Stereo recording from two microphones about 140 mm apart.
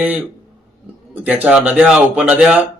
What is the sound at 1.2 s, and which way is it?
Speech, 10° right (ahead or behind).